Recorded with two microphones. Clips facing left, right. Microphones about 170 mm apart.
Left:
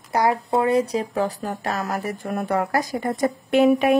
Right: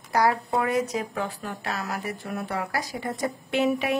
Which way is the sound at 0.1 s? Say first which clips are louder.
Left 3 dB; 25° left (ahead or behind).